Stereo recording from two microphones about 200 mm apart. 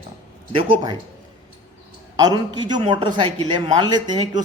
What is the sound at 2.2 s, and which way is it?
A man's voice, 20° right (ahead or behind).